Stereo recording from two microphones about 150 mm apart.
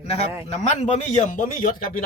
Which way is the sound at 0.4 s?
50° left (ahead or behind).